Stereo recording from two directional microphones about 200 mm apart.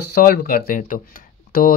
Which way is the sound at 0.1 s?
50° left (ahead or behind).